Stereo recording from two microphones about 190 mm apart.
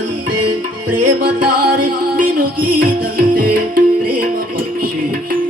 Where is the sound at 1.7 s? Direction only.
50° right (ahead or behind).